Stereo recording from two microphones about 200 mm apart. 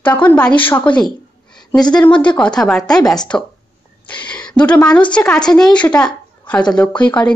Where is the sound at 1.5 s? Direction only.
5° left (ahead or behind).